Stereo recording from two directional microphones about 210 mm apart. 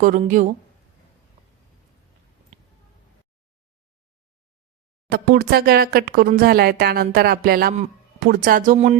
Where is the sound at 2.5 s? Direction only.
30° right (ahead or behind).